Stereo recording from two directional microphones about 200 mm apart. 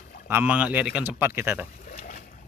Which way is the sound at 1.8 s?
45° left (ahead or behind).